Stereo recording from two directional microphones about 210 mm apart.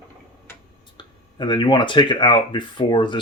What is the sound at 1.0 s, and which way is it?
Speech, 20° left (ahead or behind).